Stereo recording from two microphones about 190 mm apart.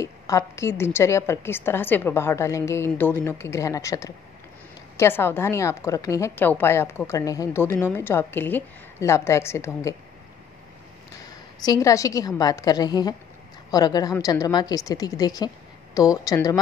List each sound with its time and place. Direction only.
0.0 s a woman's voice: 15° left (ahead or behind)
11.6 s a woman's voice: 20° left (ahead or behind)